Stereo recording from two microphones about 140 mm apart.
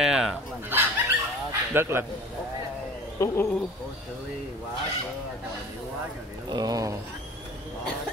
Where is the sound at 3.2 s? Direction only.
25° left (ahead or behind).